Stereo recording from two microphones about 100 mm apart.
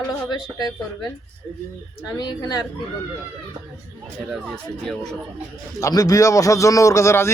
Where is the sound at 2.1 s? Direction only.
40° left (ahead or behind).